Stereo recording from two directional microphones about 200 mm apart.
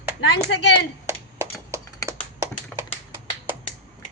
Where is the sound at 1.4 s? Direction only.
15° right (ahead or behind).